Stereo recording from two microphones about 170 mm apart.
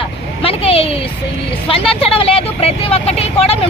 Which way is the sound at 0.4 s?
35° left (ahead or behind).